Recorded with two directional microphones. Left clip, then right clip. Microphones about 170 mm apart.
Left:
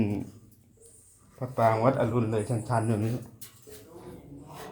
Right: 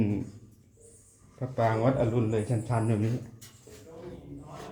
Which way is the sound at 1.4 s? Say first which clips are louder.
Left 3 dB; 30° left (ahead or behind).